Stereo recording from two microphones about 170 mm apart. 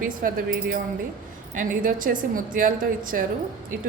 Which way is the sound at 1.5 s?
50° right (ahead or behind).